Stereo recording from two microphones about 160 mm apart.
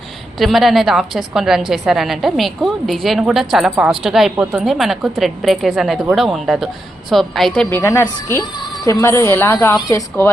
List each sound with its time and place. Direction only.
0.3 s a woman's voice: centre (ahead or behind)
7.8 s a woman's voice: 15° left (ahead or behind)